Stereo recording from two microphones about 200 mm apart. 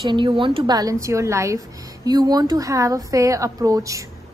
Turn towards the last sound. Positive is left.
turn(degrees=-15)  # may be behind; listen again after turning